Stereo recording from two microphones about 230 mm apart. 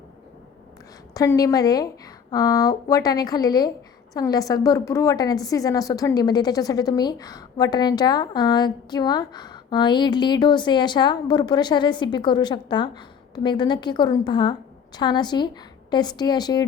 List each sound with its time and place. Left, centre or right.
1.1 s a woman's voice: centre